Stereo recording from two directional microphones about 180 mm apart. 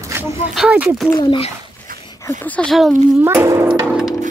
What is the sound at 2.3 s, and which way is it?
Speech, 10° left (ahead or behind).